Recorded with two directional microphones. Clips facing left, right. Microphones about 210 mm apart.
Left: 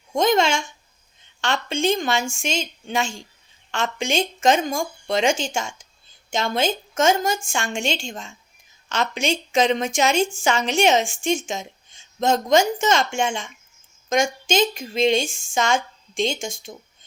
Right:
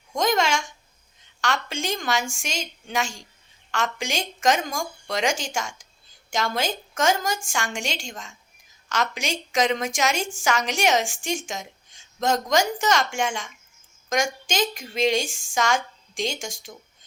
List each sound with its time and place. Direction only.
0.1 s a woman's voice: 25° left (ahead or behind)